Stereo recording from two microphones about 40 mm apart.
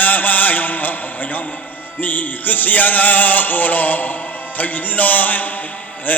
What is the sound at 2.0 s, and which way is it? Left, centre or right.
Music, left.